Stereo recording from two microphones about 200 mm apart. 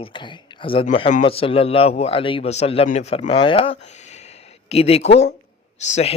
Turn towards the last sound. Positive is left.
turn(degrees=35)  # may be behind; listen again after turning